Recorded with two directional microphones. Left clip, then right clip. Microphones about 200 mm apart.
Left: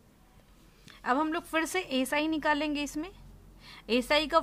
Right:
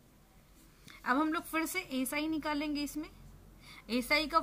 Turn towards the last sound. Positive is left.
turn(degrees=50)  # may be behind; listen again after turning